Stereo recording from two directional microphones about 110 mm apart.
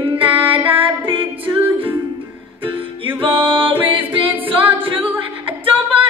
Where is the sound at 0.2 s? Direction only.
55° right (ahead or behind).